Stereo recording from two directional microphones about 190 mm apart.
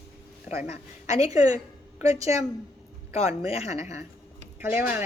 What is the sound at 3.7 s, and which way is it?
Speech, 15° right (ahead or behind).